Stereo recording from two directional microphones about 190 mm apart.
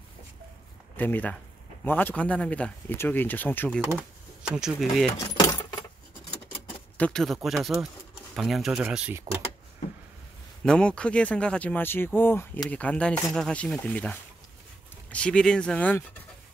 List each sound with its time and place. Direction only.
0.9 s speech: 10° left (ahead or behind)
3.9 s speech: 5° right (ahead or behind)
5.2 s keys jangling: 15° left (ahead or behind)
7.0 s speech: 5° left (ahead or behind)
10.6 s speech: 5° left (ahead or behind)